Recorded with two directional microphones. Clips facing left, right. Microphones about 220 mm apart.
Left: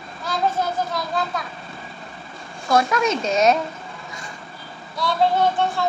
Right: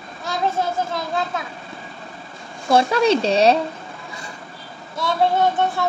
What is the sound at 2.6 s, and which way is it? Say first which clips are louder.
Speech: right 3 dB; 30° right (ahead or behind).